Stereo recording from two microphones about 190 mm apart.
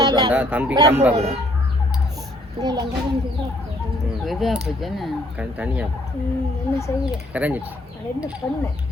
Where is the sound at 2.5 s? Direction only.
20° right (ahead or behind).